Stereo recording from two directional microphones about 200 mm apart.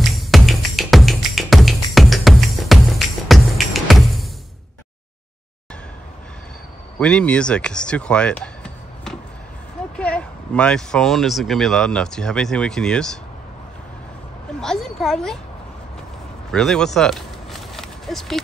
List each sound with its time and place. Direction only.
0.1 s music: centre (ahead or behind)
7.0 s speech: 5° left (ahead or behind)
14.6 s speech: centre (ahead or behind)
16.5 s a sound: centre (ahead or behind)